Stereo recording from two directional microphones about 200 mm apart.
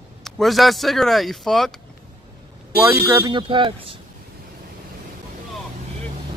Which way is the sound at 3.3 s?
25° right (ahead or behind).